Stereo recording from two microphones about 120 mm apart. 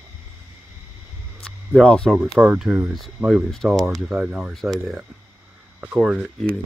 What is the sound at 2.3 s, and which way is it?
Speech, 5° right (ahead or behind).